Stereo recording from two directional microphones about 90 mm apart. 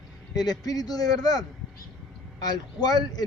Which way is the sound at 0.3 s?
45° left (ahead or behind).